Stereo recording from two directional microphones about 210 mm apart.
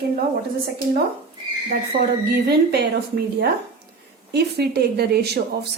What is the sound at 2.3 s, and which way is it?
Speech, 50° right (ahead or behind).